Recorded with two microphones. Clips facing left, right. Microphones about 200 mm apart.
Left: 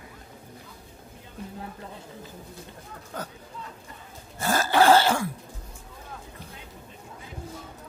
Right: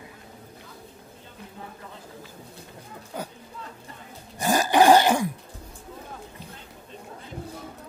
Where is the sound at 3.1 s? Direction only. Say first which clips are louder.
Right 2 dB; 10° right (ahead or behind).